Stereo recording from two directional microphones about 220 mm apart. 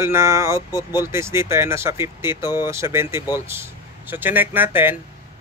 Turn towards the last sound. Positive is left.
turn(degrees=-10)  # may be behind; listen again after turning